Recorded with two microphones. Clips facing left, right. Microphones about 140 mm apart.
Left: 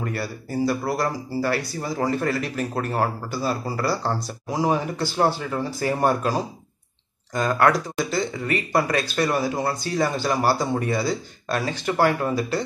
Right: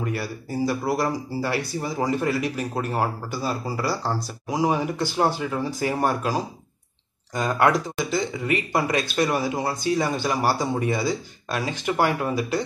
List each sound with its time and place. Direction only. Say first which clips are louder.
0.0 s speech: even; 15° right (ahead or behind)
7.3 s speech: left 1 dB; 20° right (ahead or behind)